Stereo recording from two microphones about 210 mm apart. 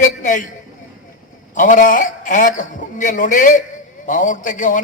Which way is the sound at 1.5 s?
40° left (ahead or behind).